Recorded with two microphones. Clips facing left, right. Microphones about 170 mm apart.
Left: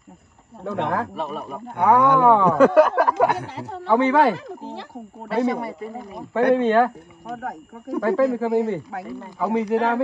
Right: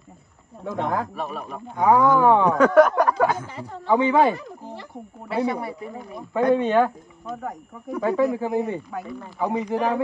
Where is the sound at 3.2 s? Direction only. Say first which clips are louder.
Left 1 dB; 70° left (ahead or behind); by 3.8 s 90° left.